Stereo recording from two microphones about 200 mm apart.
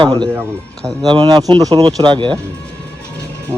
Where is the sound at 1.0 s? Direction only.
20° right (ahead or behind).